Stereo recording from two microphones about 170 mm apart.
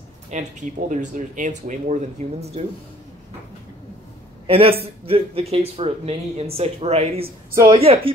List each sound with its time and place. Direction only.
0.3 s speech: 45° right (ahead or behind)
4.5 s speech: 35° right (ahead or behind)
7.5 s a woman's voice: 20° right (ahead or behind)
7.8 s speech: 35° right (ahead or behind)